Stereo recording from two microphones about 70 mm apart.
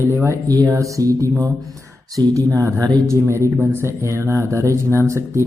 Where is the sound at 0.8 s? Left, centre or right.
Right.